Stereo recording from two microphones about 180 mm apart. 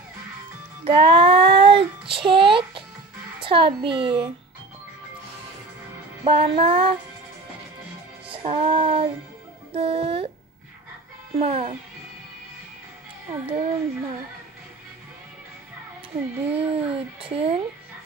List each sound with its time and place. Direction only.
0.8 s child singing: 30° right (ahead or behind)
3.3 s a child's voice: 30° right (ahead or behind)
6.2 s speech: 30° right (ahead or behind)
8.3 s female singing: 35° right (ahead or behind)
9.8 s speech: 30° right (ahead or behind)
11.3 s speech: 35° right (ahead or behind)
13.3 s speech: 30° right (ahead or behind)
16.5 s speech: 30° right (ahead or behind)